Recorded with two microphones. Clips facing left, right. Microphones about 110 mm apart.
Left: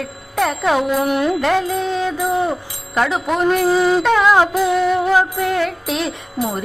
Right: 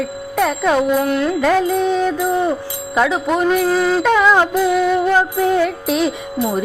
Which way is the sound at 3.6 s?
15° left (ahead or behind).